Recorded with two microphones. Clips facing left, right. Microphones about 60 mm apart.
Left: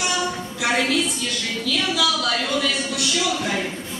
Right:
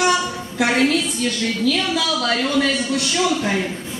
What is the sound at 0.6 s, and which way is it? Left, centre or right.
A woman's voice, right.